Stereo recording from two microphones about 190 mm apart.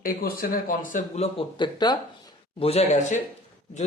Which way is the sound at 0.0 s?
50° left (ahead or behind).